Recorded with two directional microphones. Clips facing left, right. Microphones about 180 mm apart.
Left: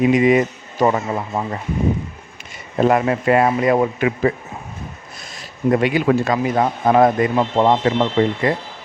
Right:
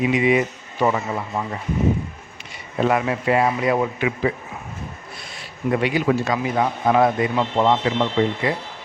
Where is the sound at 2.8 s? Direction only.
45° left (ahead or behind).